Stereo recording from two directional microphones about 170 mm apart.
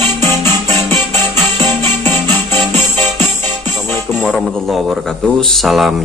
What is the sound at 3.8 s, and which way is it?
Music, 15° left (ahead or behind).